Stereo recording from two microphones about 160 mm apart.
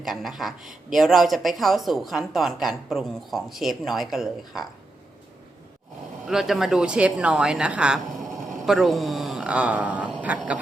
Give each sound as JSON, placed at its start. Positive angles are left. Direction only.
{"t": 0.0, "sound": "speech", "side_deg": 0}
{"t": 6.2, "sound": "speech", "side_deg": 0}